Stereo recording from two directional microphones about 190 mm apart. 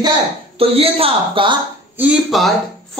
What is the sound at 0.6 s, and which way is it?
Speech, 30° right (ahead or behind).